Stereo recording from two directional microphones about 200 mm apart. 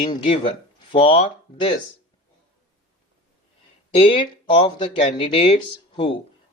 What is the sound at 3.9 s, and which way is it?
Speech, 25° left (ahead or behind).